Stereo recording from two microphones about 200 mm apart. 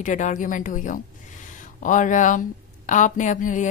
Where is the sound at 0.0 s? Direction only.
40° left (ahead or behind).